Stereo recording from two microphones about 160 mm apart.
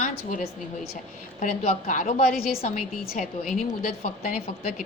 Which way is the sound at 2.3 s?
70° left (ahead or behind).